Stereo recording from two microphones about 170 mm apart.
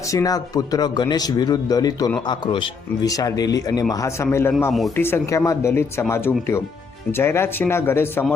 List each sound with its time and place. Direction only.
0.1 s speech: 20° left (ahead or behind)